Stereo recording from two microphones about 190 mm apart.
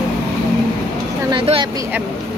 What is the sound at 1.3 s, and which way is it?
Speech, 25° right (ahead or behind).